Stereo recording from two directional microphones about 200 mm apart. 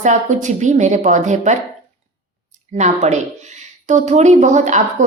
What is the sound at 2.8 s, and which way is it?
A woman's voice, 35° right (ahead or behind).